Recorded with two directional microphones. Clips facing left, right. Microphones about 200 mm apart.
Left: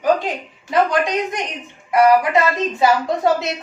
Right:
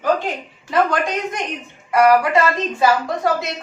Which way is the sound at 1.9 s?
20° left (ahead or behind).